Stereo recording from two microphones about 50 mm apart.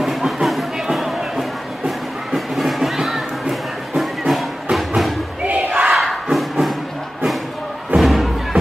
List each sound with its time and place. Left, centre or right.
0.0 s music: centre
5.4 s battle cry: right
5.9 s crowd: centre
7.9 s music: centre